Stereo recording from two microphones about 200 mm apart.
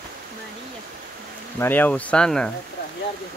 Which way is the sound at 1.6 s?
10° left (ahead or behind).